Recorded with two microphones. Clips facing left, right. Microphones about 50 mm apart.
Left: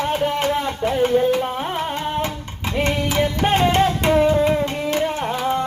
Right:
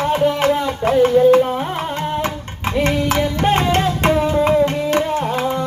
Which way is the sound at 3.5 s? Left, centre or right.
Right.